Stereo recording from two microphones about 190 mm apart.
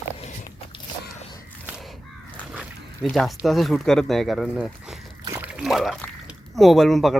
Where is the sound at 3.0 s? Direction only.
Centre (ahead or behind).